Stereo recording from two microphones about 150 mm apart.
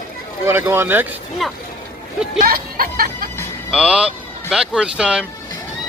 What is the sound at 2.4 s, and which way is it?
Speech, 80° right.